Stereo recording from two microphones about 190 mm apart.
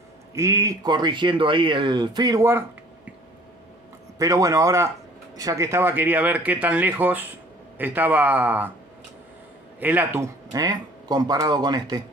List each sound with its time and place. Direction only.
0.3 s speech: 15° right (ahead or behind)
4.2 s speech: 15° right (ahead or behind)
9.8 s speech: 10° right (ahead or behind)